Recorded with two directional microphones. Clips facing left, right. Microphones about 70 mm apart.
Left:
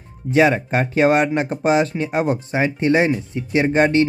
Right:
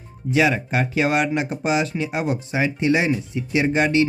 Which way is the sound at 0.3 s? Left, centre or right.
Left.